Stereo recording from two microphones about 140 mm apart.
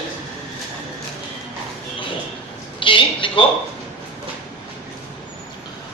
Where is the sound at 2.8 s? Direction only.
35° left (ahead or behind).